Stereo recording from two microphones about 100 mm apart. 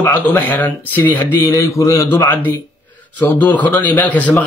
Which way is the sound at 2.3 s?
20° left (ahead or behind).